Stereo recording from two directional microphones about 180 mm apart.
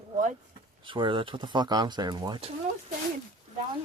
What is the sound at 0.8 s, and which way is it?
Speech, 25° right (ahead or behind).